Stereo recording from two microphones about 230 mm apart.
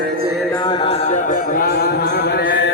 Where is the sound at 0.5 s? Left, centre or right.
Left.